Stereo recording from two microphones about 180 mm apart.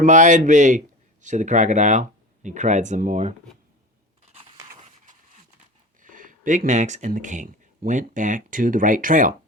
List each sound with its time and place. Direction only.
0.0 s speech: 45° right (ahead or behind)
4.7 s a sound: 45° right (ahead or behind)
6.0 s speech: 50° right (ahead or behind)